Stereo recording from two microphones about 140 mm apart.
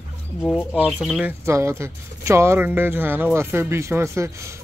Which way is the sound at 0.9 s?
5° right (ahead or behind).